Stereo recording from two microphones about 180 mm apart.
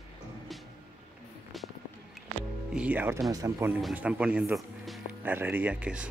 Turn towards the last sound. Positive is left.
turn(degrees=-5)  # may be behind; listen again after turning